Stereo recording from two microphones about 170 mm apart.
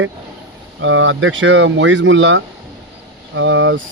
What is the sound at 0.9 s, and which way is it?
Speech, 90° right.